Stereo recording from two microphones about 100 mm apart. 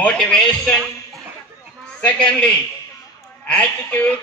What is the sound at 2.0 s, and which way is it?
Speech, 10° left (ahead or behind).